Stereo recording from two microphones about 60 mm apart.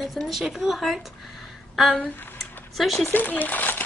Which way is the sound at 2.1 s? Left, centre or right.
Left.